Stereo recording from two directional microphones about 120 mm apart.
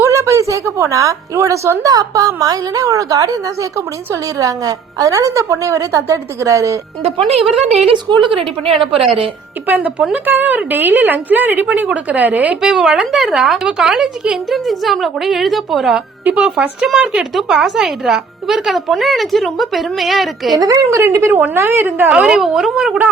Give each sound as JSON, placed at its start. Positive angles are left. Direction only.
{"t": 0.0, "sound": "a woman's voice", "side_deg": -25}
{"t": 7.9, "sound": "a woman's voice", "side_deg": -40}
{"t": 9.6, "sound": "a woman's voice", "side_deg": -15}
{"t": 20.6, "sound": "a woman's voice", "side_deg": -25}